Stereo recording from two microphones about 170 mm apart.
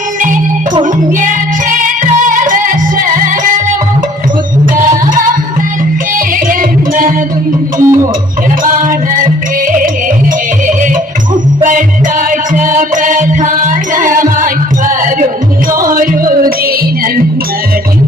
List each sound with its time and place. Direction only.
1.7 s music: 50° right (ahead or behind)
6.1 s music: 55° right (ahead or behind)
7.8 s music: 15° right (ahead or behind)
8.6 s music: 55° right (ahead or behind)
12.3 s music: 50° right (ahead or behind)